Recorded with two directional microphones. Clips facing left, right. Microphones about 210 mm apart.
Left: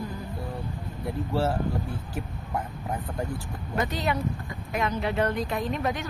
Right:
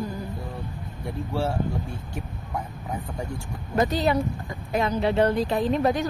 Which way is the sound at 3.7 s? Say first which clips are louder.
Right 6 dB; 35° right (ahead or behind).